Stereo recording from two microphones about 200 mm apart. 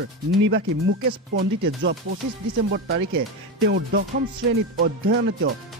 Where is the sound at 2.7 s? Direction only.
60° right (ahead or behind).